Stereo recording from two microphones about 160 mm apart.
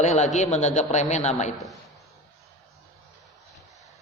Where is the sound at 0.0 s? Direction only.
45° left (ahead or behind).